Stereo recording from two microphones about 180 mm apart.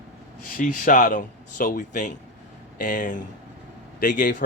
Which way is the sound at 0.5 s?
45° left (ahead or behind).